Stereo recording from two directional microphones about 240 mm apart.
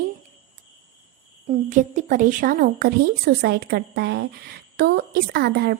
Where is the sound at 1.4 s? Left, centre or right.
Right.